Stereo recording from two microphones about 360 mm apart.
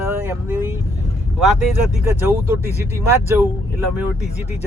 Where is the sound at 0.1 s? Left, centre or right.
Centre.